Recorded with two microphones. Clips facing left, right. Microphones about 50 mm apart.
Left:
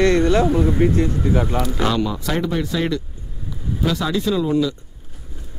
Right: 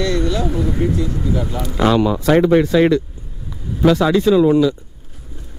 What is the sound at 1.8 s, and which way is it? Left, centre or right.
Speech, centre.